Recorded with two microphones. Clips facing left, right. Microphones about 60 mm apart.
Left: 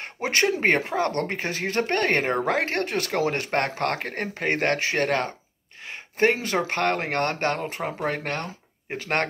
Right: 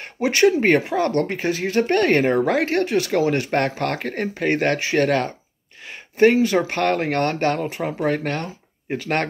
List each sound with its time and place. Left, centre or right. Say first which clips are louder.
0.0 s speech: right 7 dB; left